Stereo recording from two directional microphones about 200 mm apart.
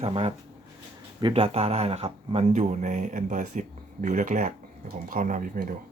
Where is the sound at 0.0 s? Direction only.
30° right (ahead or behind).